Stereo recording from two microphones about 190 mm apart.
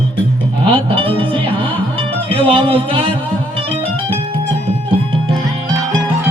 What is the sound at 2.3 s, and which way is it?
Speech, 30° right (ahead or behind).